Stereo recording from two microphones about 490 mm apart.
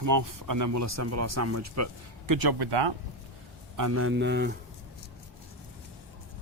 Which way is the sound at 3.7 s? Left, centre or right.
Right.